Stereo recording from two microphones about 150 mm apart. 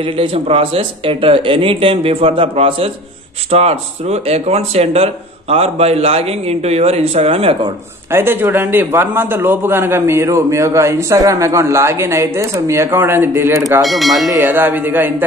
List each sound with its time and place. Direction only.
0.0 s speech: 40° right (ahead or behind)
8.1 s a man's voice: 15° right (ahead or behind)
13.8 s speech: centre (ahead or behind)
14.3 s a man's voice: 15° right (ahead or behind)